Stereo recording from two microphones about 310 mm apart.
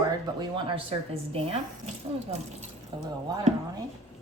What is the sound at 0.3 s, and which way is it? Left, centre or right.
Speech, centre.